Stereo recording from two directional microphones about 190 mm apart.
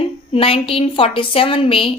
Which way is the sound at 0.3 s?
30° left (ahead or behind).